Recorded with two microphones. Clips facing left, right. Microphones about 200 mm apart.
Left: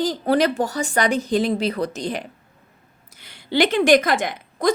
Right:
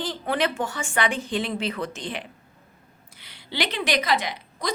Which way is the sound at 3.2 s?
50° left (ahead or behind).